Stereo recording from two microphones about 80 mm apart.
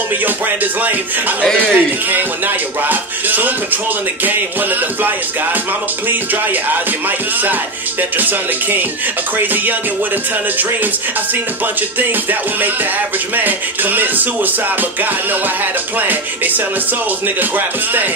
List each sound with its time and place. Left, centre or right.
1.7 s speech: right
8.2 s speech: right
11.6 s speech: right